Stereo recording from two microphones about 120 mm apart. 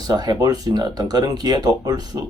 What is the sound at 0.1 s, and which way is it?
Speech, 35° right (ahead or behind).